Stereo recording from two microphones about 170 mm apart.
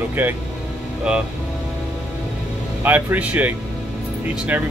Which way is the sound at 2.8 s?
10° right (ahead or behind).